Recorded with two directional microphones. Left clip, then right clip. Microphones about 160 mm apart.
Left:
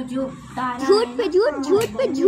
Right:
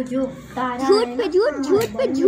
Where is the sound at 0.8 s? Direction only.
Centre (ahead or behind).